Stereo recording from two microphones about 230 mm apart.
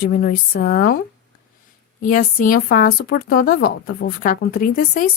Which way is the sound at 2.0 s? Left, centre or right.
Left.